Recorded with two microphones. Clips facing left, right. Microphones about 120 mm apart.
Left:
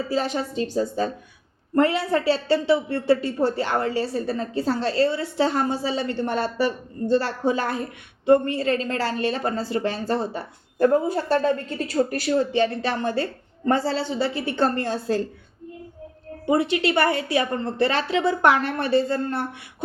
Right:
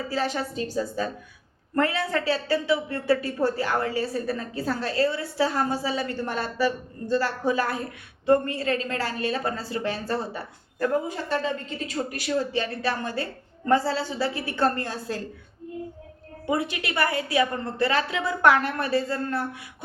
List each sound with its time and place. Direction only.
0.1 s a woman's voice: 20° left (ahead or behind)
16.5 s a woman's voice: 30° left (ahead or behind)